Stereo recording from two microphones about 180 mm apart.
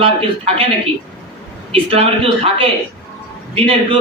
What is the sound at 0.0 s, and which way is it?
Speech, 30° right (ahead or behind).